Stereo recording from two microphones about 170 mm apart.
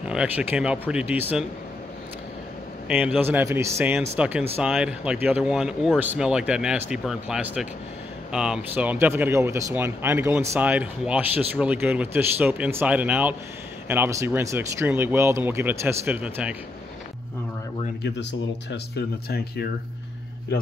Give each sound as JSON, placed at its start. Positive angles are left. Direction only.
{"t": 0.0, "sound": "speech", "side_deg": -5}
{"t": 2.9, "sound": "speech", "side_deg": -10}
{"t": 18.7, "sound": "speech", "side_deg": 70}